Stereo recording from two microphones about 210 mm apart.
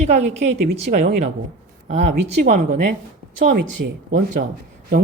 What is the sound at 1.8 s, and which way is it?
Speech, 30° right (ahead or behind).